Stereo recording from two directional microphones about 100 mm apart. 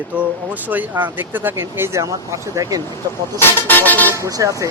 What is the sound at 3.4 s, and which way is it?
Speech, 20° left (ahead or behind).